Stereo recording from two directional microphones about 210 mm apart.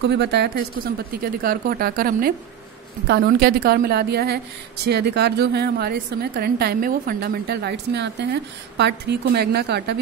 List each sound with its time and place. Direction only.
0.0 s a woman's voice: 55° right (ahead or behind)